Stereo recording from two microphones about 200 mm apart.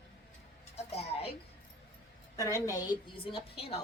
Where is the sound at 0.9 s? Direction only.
30° left (ahead or behind).